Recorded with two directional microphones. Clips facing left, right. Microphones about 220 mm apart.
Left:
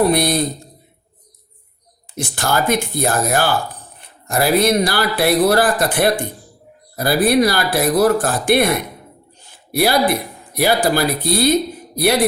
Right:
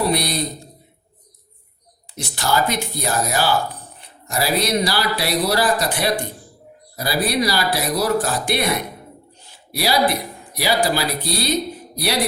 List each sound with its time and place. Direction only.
0.1 s speech: 50° left (ahead or behind)
2.1 s speech: 50° left (ahead or behind)